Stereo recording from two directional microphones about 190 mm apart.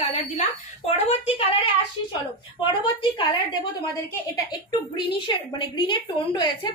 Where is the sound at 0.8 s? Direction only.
30° left (ahead or behind).